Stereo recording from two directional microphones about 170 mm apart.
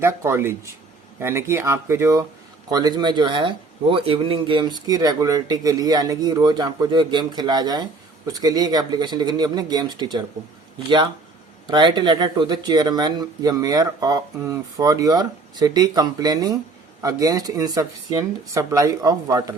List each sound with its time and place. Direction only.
0.0 s speech: 15° right (ahead or behind)